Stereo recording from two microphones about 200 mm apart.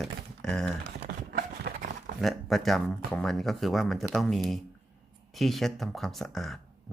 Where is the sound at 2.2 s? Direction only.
Centre (ahead or behind).